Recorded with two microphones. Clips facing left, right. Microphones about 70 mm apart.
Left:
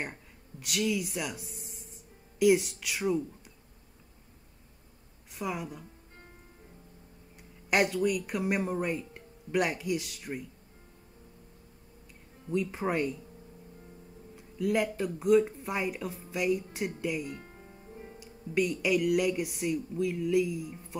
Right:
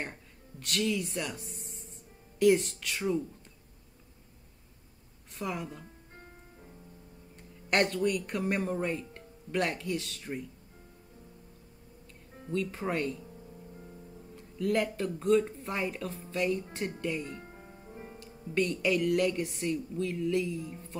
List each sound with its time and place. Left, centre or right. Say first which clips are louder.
0.0 s speech: left 1 dB; centre
5.4 s speech: left 1 dB; centre
7.3 s speech: left 1 dB; centre
12.4 s speech: left 2 dB; centre
14.3 s speech: even; centre
17.4 s music: right 1 dB; right
18.2 s speech: left 1 dB; centre